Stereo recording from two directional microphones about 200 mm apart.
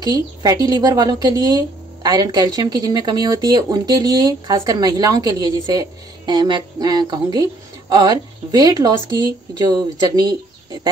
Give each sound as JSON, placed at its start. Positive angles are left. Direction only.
{"t": 0.0, "sound": "speech", "side_deg": -20}